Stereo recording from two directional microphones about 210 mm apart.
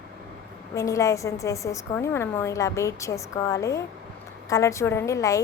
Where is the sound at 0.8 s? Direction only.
15° left (ahead or behind).